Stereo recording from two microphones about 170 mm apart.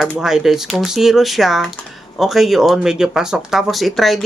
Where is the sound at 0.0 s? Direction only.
Centre (ahead or behind).